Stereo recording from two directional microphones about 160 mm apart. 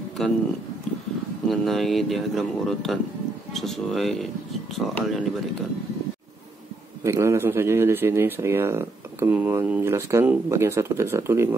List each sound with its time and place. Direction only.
0.2 s speech: centre (ahead or behind)
1.5 s speech: centre (ahead or behind)
7.0 s speech: 20° right (ahead or behind)